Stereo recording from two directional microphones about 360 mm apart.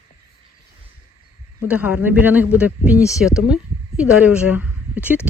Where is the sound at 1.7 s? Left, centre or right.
Centre.